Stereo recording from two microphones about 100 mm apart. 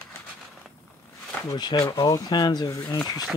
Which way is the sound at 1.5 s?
45° left (ahead or behind).